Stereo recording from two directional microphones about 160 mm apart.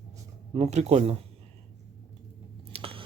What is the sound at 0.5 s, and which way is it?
Speech, 45° right (ahead or behind).